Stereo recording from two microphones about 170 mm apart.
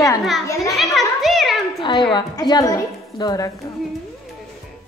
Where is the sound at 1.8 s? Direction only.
25° left (ahead or behind).